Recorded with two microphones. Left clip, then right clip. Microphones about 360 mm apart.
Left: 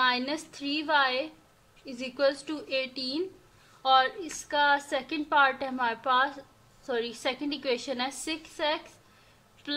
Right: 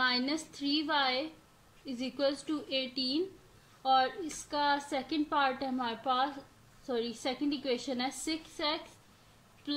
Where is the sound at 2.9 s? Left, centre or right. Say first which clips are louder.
Even; left.